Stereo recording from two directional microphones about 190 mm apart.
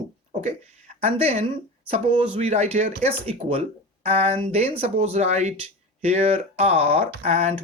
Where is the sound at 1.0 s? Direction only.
30° right (ahead or behind).